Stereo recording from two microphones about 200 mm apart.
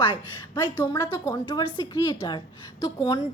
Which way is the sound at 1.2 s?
15° left (ahead or behind).